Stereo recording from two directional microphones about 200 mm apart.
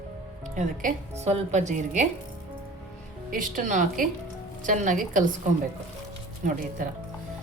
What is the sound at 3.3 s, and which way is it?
Speech, 40° right (ahead or behind).